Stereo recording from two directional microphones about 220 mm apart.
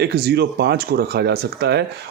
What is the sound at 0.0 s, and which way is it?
Speech, 50° right (ahead or behind).